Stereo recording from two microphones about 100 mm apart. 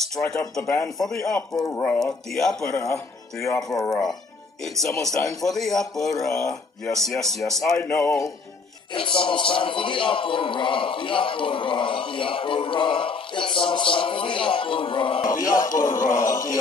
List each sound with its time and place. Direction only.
0.0 s a man's voice: 5° left (ahead or behind)
1.7 s a sound: 20° left (ahead or behind)
2.0 s a man's voice: 5° left (ahead or behind)
2.7 s a man's voice: 30° left (ahead or behind)
4.6 s a man's voice: 5° left (ahead or behind)
8.9 s a man's voice: 60° left (ahead or behind)
15.4 s a man's voice: 35° left (ahead or behind)